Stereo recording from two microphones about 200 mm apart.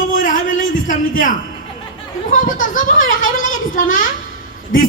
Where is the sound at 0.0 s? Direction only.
40° left (ahead or behind).